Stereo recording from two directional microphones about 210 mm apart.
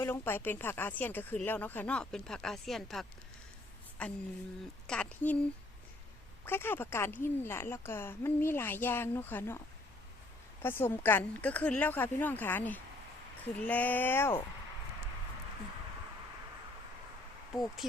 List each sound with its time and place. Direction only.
0.0 s a woman's voice: 10° left (ahead or behind)
10.6 s a woman's voice: 10° left (ahead or behind)